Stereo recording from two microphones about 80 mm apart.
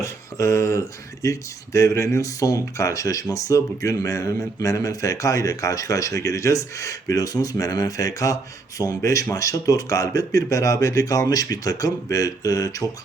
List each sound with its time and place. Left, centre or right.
0.0 s speech: left